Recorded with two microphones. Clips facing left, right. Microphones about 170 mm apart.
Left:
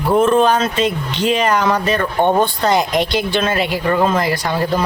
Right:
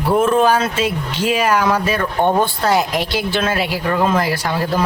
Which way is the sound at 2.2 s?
20° left (ahead or behind).